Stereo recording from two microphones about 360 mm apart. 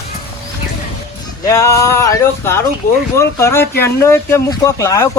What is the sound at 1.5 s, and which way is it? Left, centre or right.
Speech, centre.